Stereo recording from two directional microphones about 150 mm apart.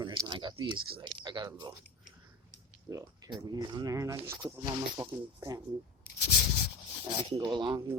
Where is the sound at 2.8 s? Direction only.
20° right (ahead or behind).